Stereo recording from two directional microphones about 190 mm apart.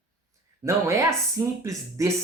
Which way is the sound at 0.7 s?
15° right (ahead or behind).